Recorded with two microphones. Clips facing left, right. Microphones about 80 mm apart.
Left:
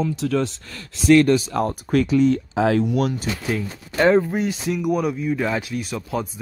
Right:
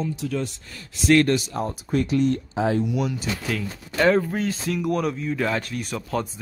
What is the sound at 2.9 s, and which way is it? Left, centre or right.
Speech, left.